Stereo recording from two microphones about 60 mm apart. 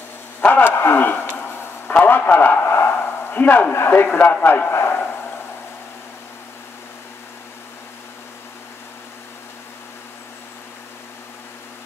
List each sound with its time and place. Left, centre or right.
0.4 s a man's voice: left
4.1 s a man's voice: left